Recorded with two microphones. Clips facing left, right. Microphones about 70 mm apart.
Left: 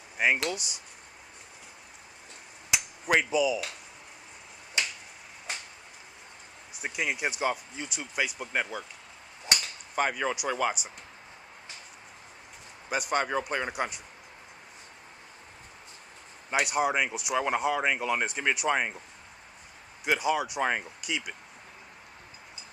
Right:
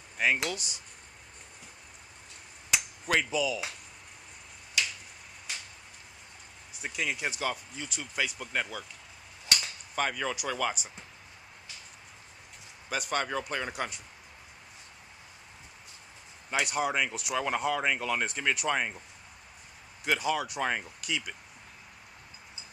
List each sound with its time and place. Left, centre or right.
0.2 s speech: centre
2.7 s a sound: centre
4.8 s finger snapping: left
5.5 s a sound: left
6.8 s speech: centre
13.1 s speech: centre
16.6 s speech: centre
20.1 s speech: centre